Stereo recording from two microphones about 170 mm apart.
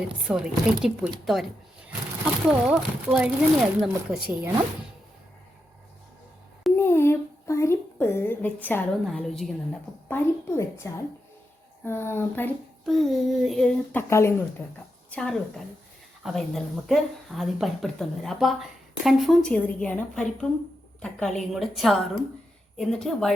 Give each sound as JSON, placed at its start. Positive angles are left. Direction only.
{"t": 0.3, "sound": "speech", "side_deg": -5}
{"t": 2.5, "sound": "speech", "side_deg": -5}
{"t": 6.7, "sound": "a sound", "side_deg": 15}
{"t": 9.0, "sound": "speech", "side_deg": 0}
{"t": 10.1, "sound": "a woman's voice", "side_deg": 15}
{"t": 12.8, "sound": "speech", "side_deg": 0}
{"t": 14.1, "sound": "a woman's voice", "side_deg": 15}
{"t": 15.1, "sound": "speech", "side_deg": 5}